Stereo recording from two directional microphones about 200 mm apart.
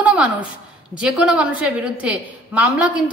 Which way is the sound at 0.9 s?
5° right (ahead or behind).